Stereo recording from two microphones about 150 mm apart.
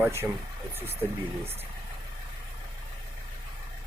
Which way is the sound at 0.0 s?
15° right (ahead or behind).